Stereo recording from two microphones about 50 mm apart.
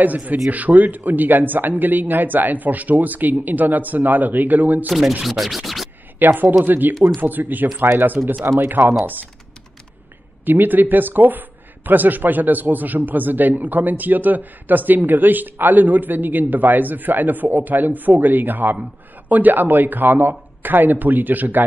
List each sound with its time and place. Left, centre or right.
0.0 s speech: right
4.8 s speech: centre
6.1 s speech: right
10.4 s speech: right